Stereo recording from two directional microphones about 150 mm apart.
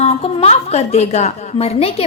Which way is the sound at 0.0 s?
40° left (ahead or behind).